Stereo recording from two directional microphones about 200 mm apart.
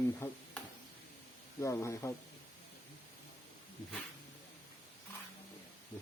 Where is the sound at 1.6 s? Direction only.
15° left (ahead or behind).